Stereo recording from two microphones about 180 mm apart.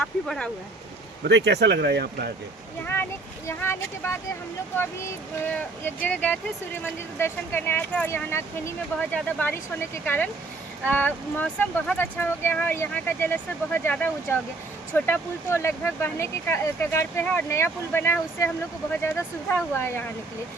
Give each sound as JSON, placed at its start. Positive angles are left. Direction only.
{"t": 0.0, "sound": "speech", "side_deg": 5}
{"t": 1.5, "sound": "speech", "side_deg": -70}
{"t": 2.8, "sound": "speech", "side_deg": 10}